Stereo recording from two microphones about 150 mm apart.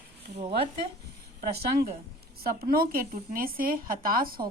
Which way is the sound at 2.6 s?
80° right.